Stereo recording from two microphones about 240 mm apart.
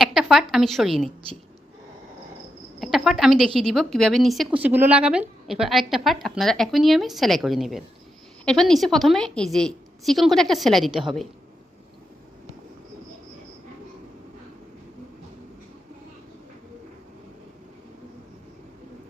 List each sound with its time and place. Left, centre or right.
0.0 s a woman's voice: centre
2.8 s a woman's voice: centre